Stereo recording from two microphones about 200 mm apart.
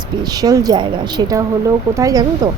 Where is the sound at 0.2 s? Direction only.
20° right (ahead or behind).